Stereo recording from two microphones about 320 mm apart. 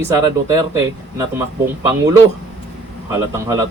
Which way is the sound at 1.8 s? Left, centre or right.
Centre.